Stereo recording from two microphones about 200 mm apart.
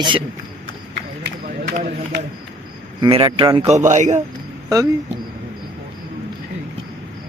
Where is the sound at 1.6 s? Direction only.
40° right (ahead or behind).